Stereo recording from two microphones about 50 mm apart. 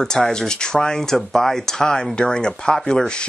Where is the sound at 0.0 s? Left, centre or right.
Centre.